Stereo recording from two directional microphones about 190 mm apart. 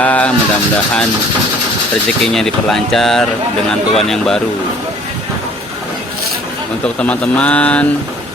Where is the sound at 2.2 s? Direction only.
5° left (ahead or behind).